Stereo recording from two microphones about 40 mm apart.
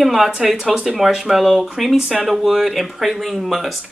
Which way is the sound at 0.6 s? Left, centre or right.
Centre.